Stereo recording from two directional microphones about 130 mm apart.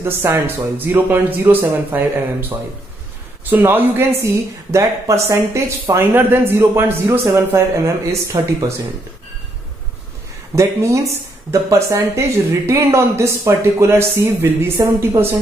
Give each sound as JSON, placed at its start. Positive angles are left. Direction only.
{"t": 0.0, "sound": "speech", "side_deg": -20}
{"t": 3.4, "sound": "a woman's voice", "side_deg": -15}
{"t": 10.5, "sound": "a woman's voice", "side_deg": -25}